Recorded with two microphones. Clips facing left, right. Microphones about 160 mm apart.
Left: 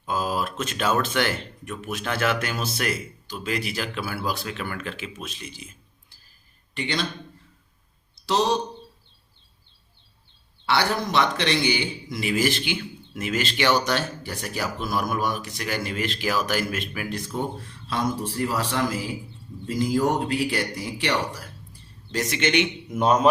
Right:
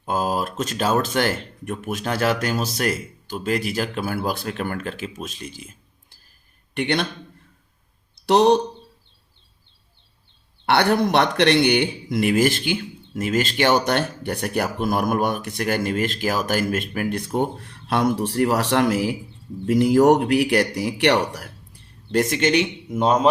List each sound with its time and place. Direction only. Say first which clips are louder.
0.0 s speech: right 3 dB; 50° right (ahead or behind)
6.7 s speech: right 5 dB; 60° right (ahead or behind)
8.3 s speech: right 7 dB; 60° right (ahead or behind)
10.7 s speech: right 6 dB; 60° right (ahead or behind); by 22.7 s 40° right (ahead or behind)
22.9 s speech: right 2 dB; 25° right (ahead or behind)